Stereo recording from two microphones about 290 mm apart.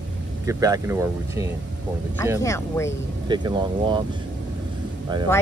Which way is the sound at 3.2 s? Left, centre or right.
Centre.